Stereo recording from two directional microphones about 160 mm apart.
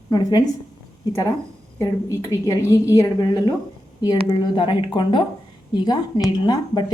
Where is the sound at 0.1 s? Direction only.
25° left (ahead or behind).